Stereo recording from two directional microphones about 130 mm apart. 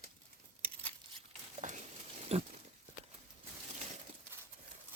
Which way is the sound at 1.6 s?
70° right (ahead or behind).